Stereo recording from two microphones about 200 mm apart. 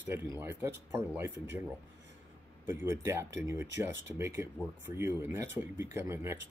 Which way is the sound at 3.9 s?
65° right (ahead or behind).